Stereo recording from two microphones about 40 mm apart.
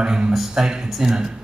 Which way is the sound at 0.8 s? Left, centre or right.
Centre.